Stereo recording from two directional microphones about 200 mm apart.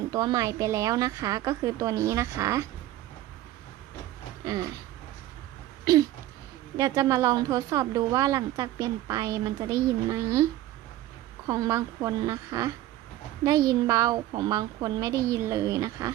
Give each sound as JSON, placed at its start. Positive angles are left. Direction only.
{"t": 0.1, "sound": "a woman's voice", "side_deg": -20}
{"t": 5.8, "sound": "a woman's voice", "side_deg": -20}
{"t": 11.4, "sound": "a woman's voice", "side_deg": -15}